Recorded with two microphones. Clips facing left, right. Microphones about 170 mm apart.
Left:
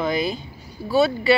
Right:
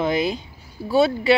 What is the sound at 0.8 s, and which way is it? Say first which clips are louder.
Speech: right 1 dB; centre (ahead or behind).